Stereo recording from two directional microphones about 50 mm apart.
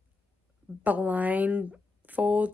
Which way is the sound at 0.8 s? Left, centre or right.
Right.